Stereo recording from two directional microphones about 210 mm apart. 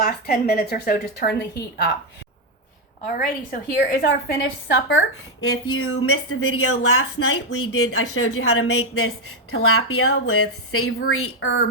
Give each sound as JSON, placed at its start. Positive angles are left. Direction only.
{"t": 0.0, "sound": "a woman's voice", "side_deg": 45}
{"t": 3.1, "sound": "a woman's voice", "side_deg": 40}
{"t": 4.7, "sound": "a woman's voice", "side_deg": 65}
{"t": 7.7, "sound": "speech", "side_deg": 90}
{"t": 11.1, "sound": "a woman's voice", "side_deg": 70}